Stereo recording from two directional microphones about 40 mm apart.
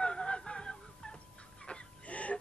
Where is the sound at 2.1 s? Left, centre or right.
Left.